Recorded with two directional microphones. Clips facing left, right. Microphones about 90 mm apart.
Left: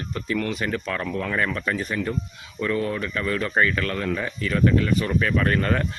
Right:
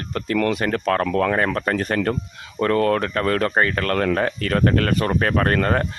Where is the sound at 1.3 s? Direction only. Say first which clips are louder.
Right 4 dB; 45° right (ahead or behind).